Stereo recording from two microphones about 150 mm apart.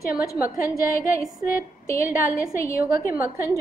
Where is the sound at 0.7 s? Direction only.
70° left (ahead or behind).